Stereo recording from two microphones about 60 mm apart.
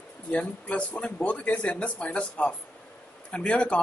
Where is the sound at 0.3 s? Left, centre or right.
Left.